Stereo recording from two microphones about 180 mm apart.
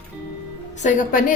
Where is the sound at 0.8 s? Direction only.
45° left (ahead or behind).